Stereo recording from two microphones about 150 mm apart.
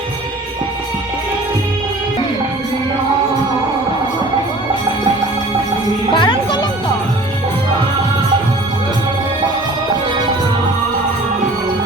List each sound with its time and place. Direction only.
6.1 s music: 30° left (ahead or behind)